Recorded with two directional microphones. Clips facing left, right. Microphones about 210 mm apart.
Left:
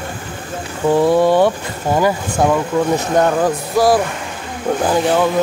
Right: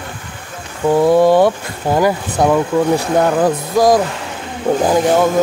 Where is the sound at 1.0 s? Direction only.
15° right (ahead or behind).